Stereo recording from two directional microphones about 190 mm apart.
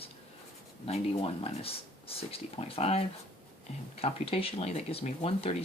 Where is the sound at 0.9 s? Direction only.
30° left (ahead or behind).